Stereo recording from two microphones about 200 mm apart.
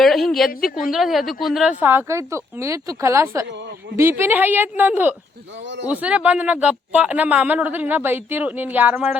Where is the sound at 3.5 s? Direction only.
60° right (ahead or behind).